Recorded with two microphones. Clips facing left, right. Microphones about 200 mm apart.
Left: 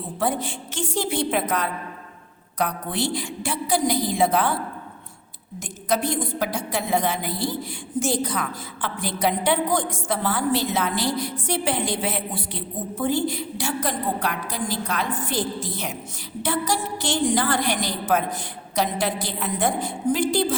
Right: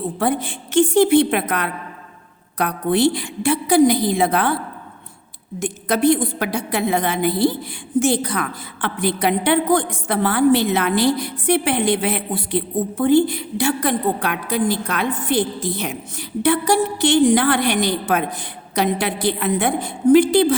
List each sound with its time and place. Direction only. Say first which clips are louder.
0.2 s a woman's voice: right 2 dB; 60° right (ahead or behind)
5.5 s a woman's voice: right 4 dB; 60° right (ahead or behind)